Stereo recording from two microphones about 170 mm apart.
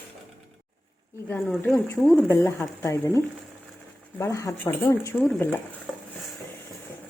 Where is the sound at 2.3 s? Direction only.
15° left (ahead or behind).